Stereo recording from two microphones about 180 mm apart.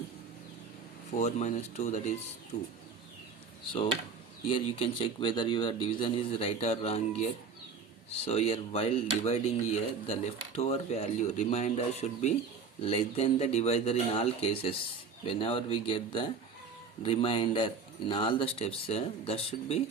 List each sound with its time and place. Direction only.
1.1 s speech: 40° left (ahead or behind)
4.4 s speech: 30° left (ahead or behind)